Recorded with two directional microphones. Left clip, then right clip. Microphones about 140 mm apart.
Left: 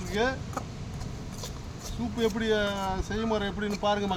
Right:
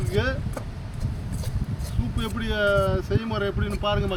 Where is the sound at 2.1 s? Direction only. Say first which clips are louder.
Left 2 dB; 30° left (ahead or behind).